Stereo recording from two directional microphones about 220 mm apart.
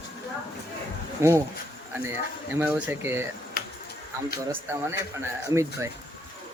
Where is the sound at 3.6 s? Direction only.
45° left (ahead or behind).